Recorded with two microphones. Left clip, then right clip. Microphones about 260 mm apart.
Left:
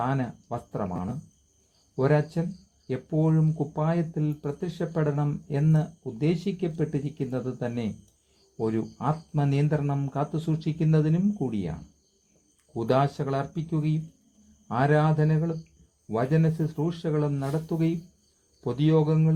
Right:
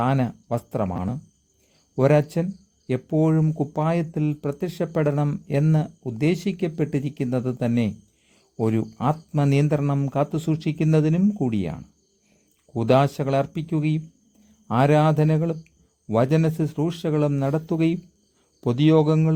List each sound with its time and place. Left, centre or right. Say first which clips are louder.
0.0 s speech: right 5 dB; right